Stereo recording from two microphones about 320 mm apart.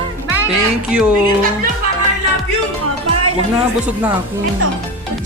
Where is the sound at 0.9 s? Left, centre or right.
Centre.